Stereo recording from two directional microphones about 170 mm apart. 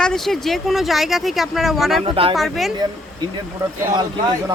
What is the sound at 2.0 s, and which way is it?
Speech, 30° right (ahead or behind).